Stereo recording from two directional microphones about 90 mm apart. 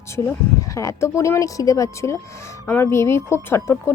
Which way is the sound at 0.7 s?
35° left (ahead or behind).